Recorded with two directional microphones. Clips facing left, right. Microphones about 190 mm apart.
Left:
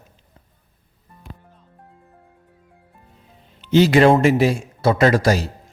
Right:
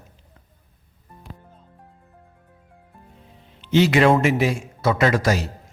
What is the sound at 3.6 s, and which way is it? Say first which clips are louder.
A man's voice: left 3 dB; 40° left (ahead or behind).